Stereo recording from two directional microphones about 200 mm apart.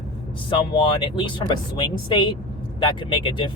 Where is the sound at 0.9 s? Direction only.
25° left (ahead or behind).